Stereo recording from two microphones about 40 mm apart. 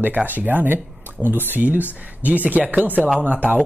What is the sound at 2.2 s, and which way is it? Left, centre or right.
Speech, right.